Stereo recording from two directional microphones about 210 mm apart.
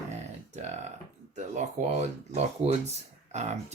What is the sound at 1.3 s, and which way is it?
Speech, 35° right (ahead or behind).